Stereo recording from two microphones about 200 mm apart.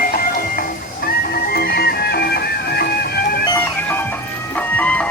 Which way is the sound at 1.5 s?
50° left (ahead or behind).